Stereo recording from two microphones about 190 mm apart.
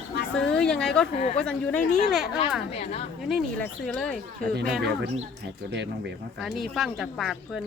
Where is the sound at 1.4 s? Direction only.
5° left (ahead or behind).